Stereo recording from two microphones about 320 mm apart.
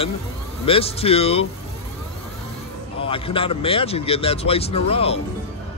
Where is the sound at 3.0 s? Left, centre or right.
Centre.